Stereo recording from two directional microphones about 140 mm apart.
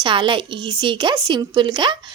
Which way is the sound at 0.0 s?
35° right (ahead or behind).